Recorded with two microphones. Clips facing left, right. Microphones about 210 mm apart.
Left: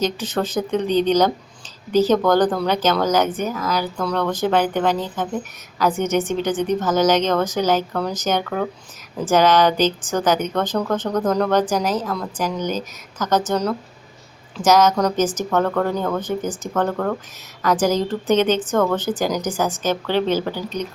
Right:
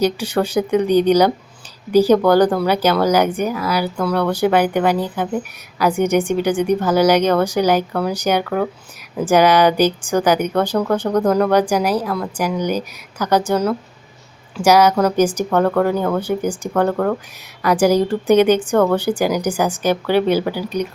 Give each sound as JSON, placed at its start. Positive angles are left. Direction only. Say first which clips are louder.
{"t": 0.0, "sound": "speech", "louder": "right 4 dB", "side_deg": -10}